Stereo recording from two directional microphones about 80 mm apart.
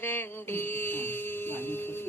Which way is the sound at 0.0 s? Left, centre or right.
Left.